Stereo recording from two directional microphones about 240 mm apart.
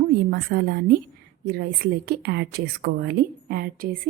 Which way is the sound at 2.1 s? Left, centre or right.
Right.